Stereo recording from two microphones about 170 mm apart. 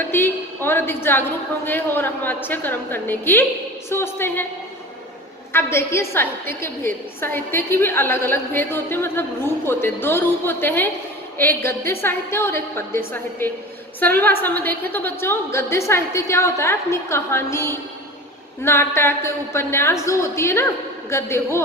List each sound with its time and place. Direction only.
0.0 s a woman's voice: 10° left (ahead or behind)
5.5 s a woman's voice: 15° left (ahead or behind)
14.0 s a woman's voice: 10° left (ahead or behind)